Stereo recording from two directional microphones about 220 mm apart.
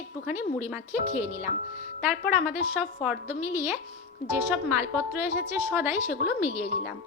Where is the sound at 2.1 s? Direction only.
Centre (ahead or behind).